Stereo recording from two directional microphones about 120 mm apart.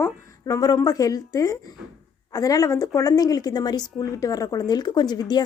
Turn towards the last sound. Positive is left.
turn(degrees=35)  # may be behind; listen again after turning